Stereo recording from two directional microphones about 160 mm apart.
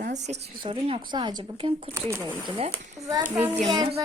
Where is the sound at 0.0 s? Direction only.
50° right (ahead or behind).